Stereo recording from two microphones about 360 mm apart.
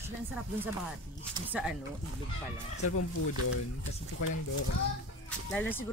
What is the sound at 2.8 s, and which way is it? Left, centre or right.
Speech, left.